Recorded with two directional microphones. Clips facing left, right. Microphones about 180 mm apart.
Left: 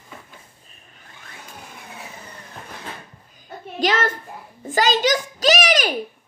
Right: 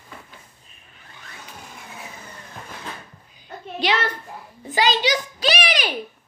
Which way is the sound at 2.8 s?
45° left (ahead or behind).